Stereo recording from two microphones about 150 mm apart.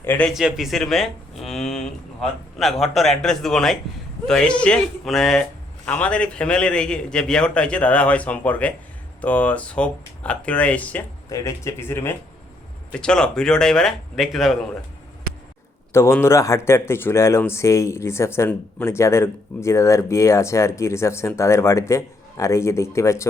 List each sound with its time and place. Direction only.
0.0 s a man's voice: 15° left (ahead or behind)
0.3 s a man's voice: centre (ahead or behind)
11.3 s a man's voice: 20° left (ahead or behind)
12.9 s speech: 5° left (ahead or behind)
15.9 s speech: 15° left (ahead or behind)